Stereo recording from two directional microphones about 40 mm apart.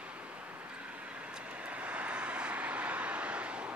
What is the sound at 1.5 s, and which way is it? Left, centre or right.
Vehicle, right.